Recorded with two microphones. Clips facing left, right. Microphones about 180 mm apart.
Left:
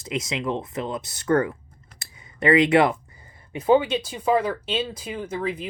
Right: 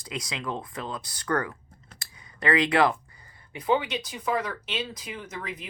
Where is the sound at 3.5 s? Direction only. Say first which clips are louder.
Left 7 dB; 25° left (ahead or behind).